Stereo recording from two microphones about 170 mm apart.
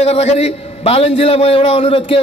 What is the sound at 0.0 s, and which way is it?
A man's voice, 35° left (ahead or behind).